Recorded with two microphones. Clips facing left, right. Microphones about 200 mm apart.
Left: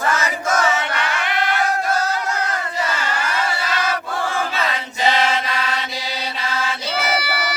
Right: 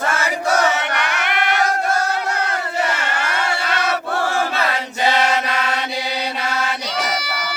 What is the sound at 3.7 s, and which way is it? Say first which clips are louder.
Choir: right 2 dB; 65° right (ahead or behind).